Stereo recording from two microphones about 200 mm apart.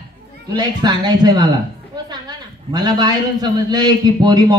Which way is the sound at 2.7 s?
20° right (ahead or behind).